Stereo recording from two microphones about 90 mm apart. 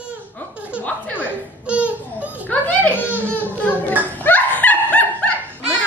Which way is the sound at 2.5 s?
15° left (ahead or behind).